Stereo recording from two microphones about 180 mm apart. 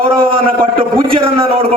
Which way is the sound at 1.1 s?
30° right (ahead or behind).